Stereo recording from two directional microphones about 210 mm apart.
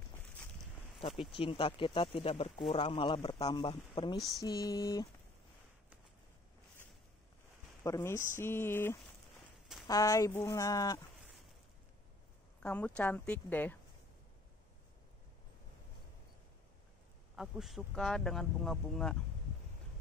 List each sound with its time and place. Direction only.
1.3 s speech: 25° left (ahead or behind)
7.8 s speech: 15° left (ahead or behind)
12.6 s speech: 5° left (ahead or behind)
17.4 s speech: centre (ahead or behind)